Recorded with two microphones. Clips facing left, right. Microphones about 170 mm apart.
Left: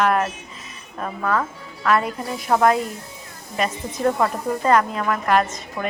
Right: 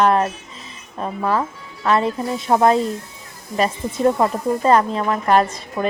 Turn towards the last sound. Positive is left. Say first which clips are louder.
# right 3 dB
turn(degrees=-30)  # may be behind; listen again after turning